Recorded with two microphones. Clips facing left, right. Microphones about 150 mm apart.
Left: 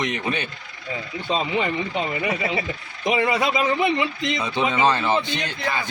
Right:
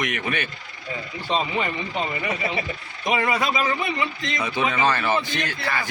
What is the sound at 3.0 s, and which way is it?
A man's voice, 20° left (ahead or behind).